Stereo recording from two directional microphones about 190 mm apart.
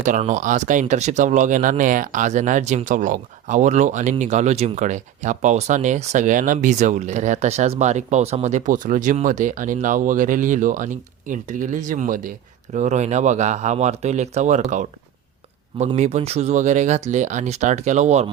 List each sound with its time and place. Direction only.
0.0 s speech: 40° right (ahead or behind)
16.0 s speech: 35° right (ahead or behind)